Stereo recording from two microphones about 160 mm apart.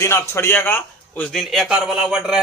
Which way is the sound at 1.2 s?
Centre (ahead or behind).